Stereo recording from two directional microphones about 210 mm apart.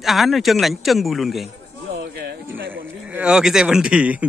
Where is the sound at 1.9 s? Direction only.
45° right (ahead or behind).